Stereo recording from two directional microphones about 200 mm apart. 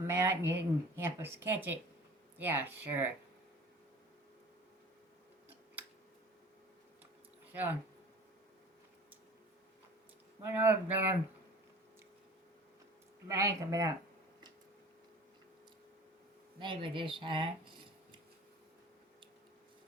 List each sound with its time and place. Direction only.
0.0 s speech: 15° right (ahead or behind)
7.5 s speech: 10° right (ahead or behind)
10.5 s speech: 10° right (ahead or behind)
13.2 s speech: 15° right (ahead or behind)
16.6 s speech: 25° right (ahead or behind)